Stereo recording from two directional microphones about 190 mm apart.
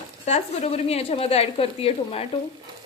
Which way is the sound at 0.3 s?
35° left (ahead or behind).